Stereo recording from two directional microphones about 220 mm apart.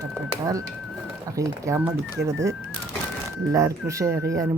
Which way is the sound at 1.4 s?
15° right (ahead or behind).